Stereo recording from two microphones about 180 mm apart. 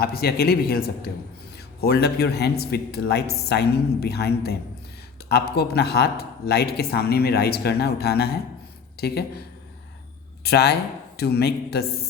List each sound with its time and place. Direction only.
0.0 s speech: 60° left (ahead or behind)
10.4 s speech: 65° left (ahead or behind)